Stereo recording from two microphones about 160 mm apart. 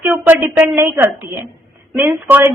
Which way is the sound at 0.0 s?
10° right (ahead or behind).